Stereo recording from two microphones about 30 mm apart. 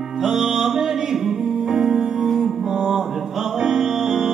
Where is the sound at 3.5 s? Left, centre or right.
Centre.